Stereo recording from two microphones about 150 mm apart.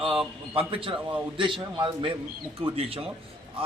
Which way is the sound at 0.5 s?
35° right (ahead or behind).